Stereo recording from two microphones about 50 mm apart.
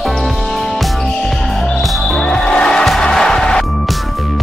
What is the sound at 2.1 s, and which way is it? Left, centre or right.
Music, centre.